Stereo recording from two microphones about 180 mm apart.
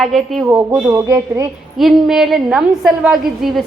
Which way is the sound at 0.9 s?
15° right (ahead or behind).